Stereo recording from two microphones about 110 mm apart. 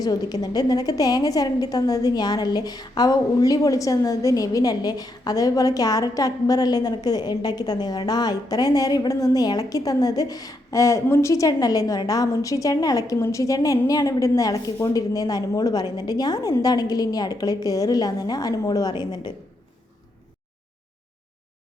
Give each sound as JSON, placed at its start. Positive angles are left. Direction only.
{"t": 0.0, "sound": "a woman's voice", "side_deg": 35}